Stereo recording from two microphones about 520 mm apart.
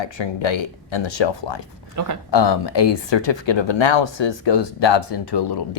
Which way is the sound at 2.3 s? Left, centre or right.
Left.